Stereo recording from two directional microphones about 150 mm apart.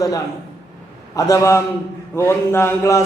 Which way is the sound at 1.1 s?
20° left (ahead or behind).